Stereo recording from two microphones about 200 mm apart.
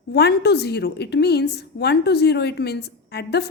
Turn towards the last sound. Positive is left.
turn(degrees=55)  # may be behind; listen again after turning